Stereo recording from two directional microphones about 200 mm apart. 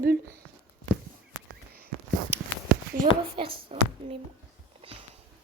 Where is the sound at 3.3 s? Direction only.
25° right (ahead or behind).